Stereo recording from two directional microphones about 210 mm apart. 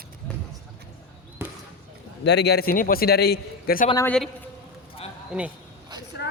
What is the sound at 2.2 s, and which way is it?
Speech, 55° left (ahead or behind).